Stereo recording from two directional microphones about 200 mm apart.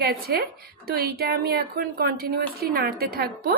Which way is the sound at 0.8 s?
50° right (ahead or behind).